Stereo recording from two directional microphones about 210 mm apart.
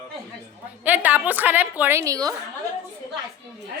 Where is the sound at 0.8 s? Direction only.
10° right (ahead or behind).